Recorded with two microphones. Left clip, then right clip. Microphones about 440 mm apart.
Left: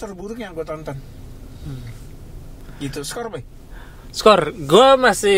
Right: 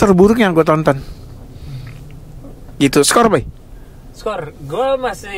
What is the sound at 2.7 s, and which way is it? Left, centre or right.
Speech, right.